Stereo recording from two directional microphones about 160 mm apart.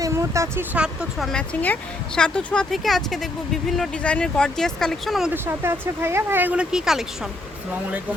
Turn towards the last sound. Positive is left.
turn(degrees=-5)  # may be behind; listen again after turning